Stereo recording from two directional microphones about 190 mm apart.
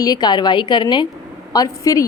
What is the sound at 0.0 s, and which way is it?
A woman's voice, 20° left (ahead or behind).